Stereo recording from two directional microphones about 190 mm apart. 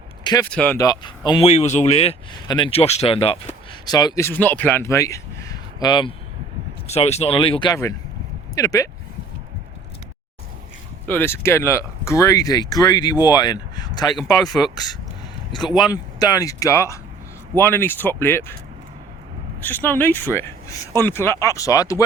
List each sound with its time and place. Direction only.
0.5 s speech: 5° left (ahead or behind)
0.8 s speech: 20° left (ahead or behind)
1.5 s speech: 35° left (ahead or behind); by 8.9 s 15° left (ahead or behind)
11.0 s speech: 10° left (ahead or behind)
14.4 s speech: 5° left (ahead or behind)
15.9 s speech: 20° left (ahead or behind)
19.6 s speech: 10° left (ahead or behind)